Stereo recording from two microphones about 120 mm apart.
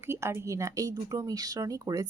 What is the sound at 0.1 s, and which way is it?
Speech, 20° right (ahead or behind).